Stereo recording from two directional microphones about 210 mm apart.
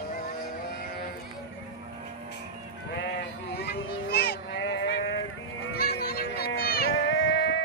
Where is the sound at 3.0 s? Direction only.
50° left (ahead or behind).